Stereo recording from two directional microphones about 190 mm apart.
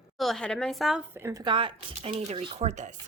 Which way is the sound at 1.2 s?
20° right (ahead or behind).